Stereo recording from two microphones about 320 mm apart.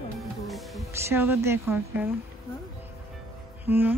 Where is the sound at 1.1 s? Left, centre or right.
Centre.